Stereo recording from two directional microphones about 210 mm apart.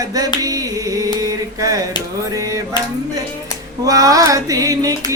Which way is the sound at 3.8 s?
15° right (ahead or behind).